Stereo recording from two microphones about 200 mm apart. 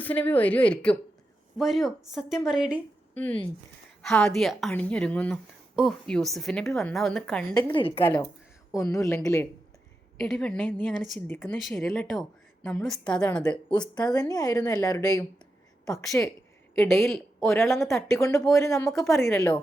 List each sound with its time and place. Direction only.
0.0 s a woman's voice: 10° left (ahead or behind)
3.2 s a woman's voice: 5° left (ahead or behind)
7.5 s speech: 20° left (ahead or behind)
8.7 s a woman's voice: 15° left (ahead or behind)
10.2 s a woman's voice: centre (ahead or behind)
13.7 s a woman's voice: 20° left (ahead or behind); by 17.5 s centre (ahead or behind)
17.9 s a woman's voice: 15° left (ahead or behind)
18.9 s a woman's voice: centre (ahead or behind)